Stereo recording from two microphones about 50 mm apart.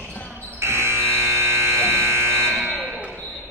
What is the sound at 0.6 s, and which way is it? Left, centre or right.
Buzzer, right.